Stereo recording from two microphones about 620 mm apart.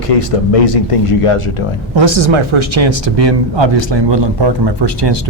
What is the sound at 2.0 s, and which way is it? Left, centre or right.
Speech, right.